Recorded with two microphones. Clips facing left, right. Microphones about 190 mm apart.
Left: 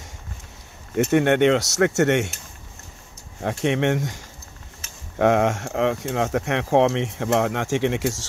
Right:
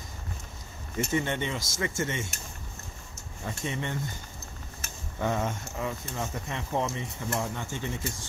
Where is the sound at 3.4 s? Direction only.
75° left (ahead or behind).